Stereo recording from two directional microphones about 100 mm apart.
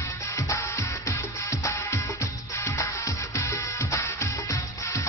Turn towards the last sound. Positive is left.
turn(degrees=30)  # may be behind; listen again after turning